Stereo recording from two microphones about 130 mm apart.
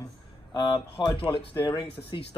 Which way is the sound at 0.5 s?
35° left (ahead or behind).